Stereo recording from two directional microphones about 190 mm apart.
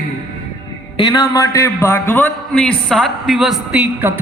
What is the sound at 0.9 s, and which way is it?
A man's voice, 20° left (ahead or behind).